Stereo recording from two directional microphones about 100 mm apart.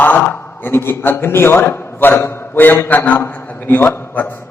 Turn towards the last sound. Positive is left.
turn(degrees=20)  # may be behind; listen again after turning